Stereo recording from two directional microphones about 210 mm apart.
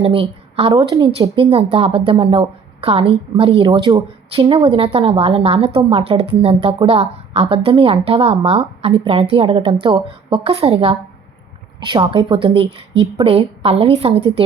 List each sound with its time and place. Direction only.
0.0 s speech: 25° right (ahead or behind)